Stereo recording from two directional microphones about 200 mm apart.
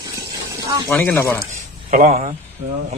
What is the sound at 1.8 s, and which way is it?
Speech, 40° right (ahead or behind).